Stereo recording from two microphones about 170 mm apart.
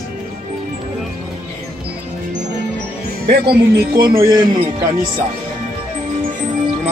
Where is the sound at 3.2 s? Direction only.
65° right (ahead or behind).